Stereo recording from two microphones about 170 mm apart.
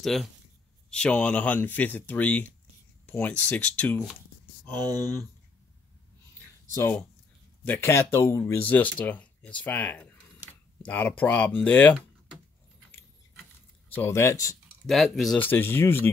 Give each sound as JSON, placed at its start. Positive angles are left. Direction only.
{"t": 0.0, "sound": "speech", "side_deg": 0}
{"t": 6.7, "sound": "speech", "side_deg": 15}
{"t": 13.9, "sound": "speech", "side_deg": 15}
{"t": 14.9, "sound": "speech", "side_deg": 0}
{"t": 15.4, "sound": "speech", "side_deg": 10}